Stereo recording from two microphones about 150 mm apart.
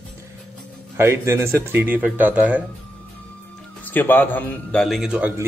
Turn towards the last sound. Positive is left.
turn(degrees=-5)  # may be behind; listen again after turning